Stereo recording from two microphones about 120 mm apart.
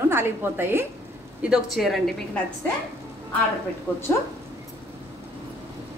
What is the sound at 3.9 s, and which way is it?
Speech, 15° left (ahead or behind).